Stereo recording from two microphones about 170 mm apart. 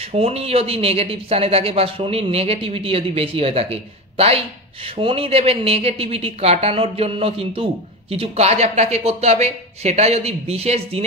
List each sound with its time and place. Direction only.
0.0 s speech: 35° right (ahead or behind)
4.8 s speech: 35° right (ahead or behind)